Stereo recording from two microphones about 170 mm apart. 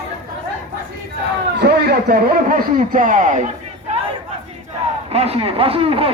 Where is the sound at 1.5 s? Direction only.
70° right (ahead or behind); by 3.4 s 50° right (ahead or behind).